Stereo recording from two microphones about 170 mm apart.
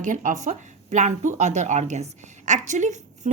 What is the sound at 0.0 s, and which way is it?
A woman's voice, 45° right (ahead or behind).